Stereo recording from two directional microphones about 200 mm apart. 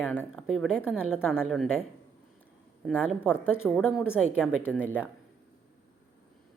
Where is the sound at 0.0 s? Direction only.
5° left (ahead or behind).